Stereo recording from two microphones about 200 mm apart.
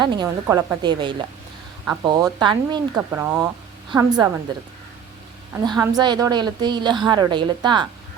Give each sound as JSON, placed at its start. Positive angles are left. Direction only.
{"t": 0.0, "sound": "a woman's voice", "side_deg": -20}
{"t": 0.4, "sound": "speech", "side_deg": -10}
{"t": 0.8, "sound": "a woman's voice", "side_deg": -20}
{"t": 5.6, "sound": "a woman's voice", "side_deg": -20}